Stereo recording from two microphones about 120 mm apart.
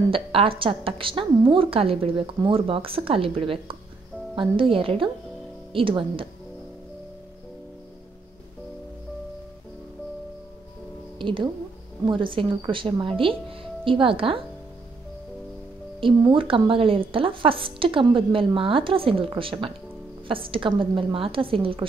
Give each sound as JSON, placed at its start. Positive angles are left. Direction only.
{"t": 0.1, "sound": "a woman's voice", "side_deg": -50}
{"t": 11.1, "sound": "a woman's voice", "side_deg": -45}
{"t": 16.0, "sound": "a woman's voice", "side_deg": -45}